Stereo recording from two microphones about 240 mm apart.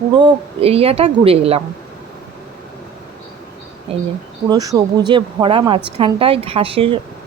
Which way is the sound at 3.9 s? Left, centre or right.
Right.